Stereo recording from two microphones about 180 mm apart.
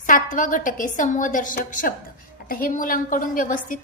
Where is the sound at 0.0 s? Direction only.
50° left (ahead or behind).